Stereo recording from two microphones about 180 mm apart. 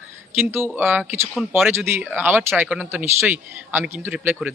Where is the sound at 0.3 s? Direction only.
10° right (ahead or behind).